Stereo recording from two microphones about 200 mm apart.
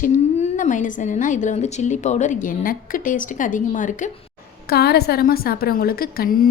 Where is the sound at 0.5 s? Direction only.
40° left (ahead or behind).